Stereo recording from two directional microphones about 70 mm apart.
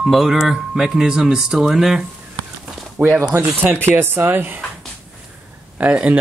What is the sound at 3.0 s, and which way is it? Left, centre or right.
Speech, right.